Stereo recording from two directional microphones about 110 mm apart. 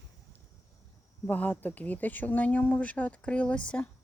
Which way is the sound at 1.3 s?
15° left (ahead or behind).